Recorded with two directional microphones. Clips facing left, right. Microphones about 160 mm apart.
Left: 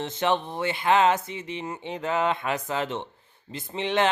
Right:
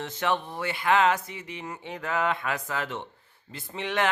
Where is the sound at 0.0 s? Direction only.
25° left (ahead or behind).